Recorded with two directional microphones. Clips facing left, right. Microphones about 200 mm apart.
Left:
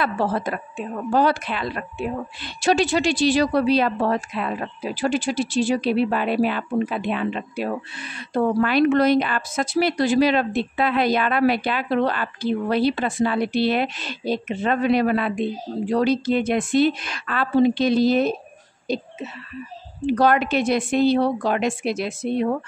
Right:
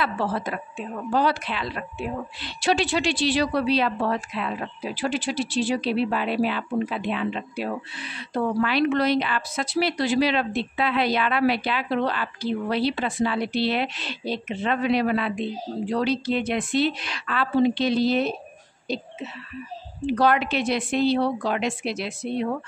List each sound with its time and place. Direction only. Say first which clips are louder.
0.0 s a woman's voice: left 3 dB; 45° left (ahead or behind)
20.1 s a woman's voice: left 3 dB; 45° left (ahead or behind)